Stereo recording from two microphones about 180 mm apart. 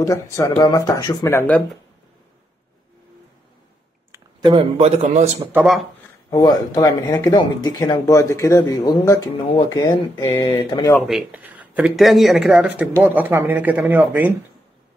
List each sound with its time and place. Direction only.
0.0 s speech: 15° left (ahead or behind)
4.4 s a man's voice: 30° right (ahead or behind)
5.5 s speech: 5° right (ahead or behind)
6.3 s speech: 20° left (ahead or behind)
11.1 s speech: 5° right (ahead or behind)